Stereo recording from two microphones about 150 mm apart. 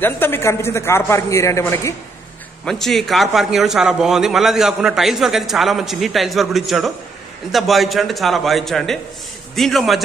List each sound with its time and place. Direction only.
0.0 s a man's voice: 15° left (ahead or behind)
2.6 s a man's voice: 5° left (ahead or behind)